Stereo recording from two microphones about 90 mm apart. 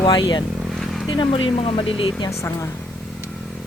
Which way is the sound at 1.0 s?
60° left (ahead or behind).